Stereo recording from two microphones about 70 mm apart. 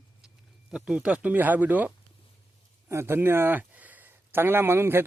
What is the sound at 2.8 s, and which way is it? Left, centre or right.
Speech, right.